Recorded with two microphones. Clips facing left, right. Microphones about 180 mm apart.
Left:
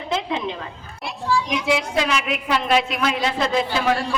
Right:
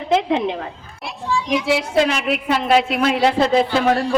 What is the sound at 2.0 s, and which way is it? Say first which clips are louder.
A woman's voice: right 5 dB; 55° right (ahead or behind).